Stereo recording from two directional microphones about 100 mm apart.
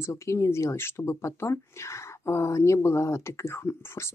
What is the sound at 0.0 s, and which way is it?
Speech, 30° left (ahead or behind).